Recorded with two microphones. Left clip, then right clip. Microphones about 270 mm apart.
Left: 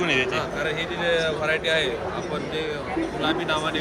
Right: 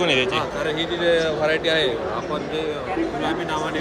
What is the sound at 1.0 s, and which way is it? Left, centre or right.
Speech, right.